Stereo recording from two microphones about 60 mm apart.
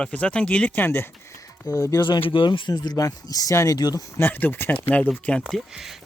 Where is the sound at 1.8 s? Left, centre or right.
Left.